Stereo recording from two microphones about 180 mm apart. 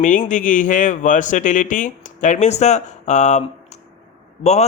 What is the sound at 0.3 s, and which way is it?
A man's voice, 45° left (ahead or behind).